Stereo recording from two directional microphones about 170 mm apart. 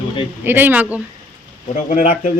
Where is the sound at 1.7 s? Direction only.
45° left (ahead or behind).